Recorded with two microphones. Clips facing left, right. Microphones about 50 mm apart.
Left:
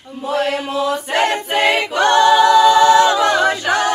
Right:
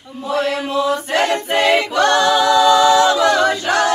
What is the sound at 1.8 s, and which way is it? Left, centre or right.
Music, centre.